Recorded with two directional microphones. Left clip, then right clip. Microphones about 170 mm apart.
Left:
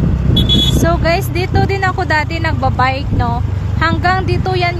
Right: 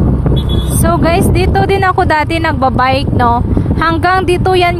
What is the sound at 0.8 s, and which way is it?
Speech, 25° right (ahead or behind).